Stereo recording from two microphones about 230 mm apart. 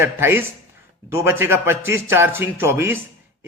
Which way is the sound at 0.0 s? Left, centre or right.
Centre.